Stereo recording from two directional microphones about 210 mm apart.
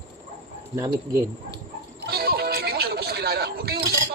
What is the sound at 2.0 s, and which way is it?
Music, 50° right (ahead or behind).